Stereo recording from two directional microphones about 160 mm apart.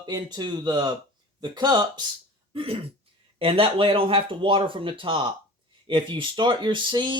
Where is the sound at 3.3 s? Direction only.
35° right (ahead or behind).